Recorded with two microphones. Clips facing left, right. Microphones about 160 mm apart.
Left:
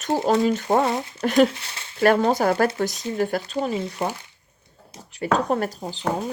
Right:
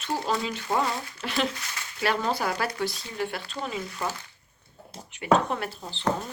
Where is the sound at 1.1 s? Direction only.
45° left (ahead or behind).